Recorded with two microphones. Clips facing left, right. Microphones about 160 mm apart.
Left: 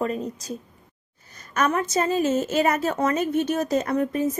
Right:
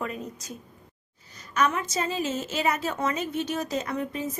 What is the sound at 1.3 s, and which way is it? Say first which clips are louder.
A woman's voice: left 3 dB; 50° left (ahead or behind).